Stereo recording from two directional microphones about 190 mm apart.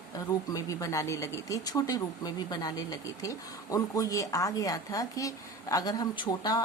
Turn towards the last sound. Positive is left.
turn(degrees=20)  # may be behind; listen again after turning